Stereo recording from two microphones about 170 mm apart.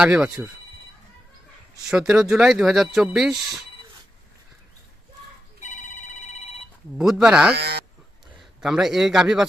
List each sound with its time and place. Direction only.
0.0 s speech: 5° right (ahead or behind)
1.9 s speech: 5° right (ahead or behind)
5.6 s telephone: 45° left (ahead or behind)
7.0 s speech: centre (ahead or behind)
7.5 s speech: 70° right (ahead or behind)
8.4 s a man's voice: 5° right (ahead or behind)